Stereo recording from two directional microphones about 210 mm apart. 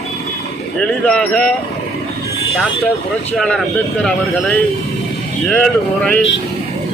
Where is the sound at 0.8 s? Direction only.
5° left (ahead or behind).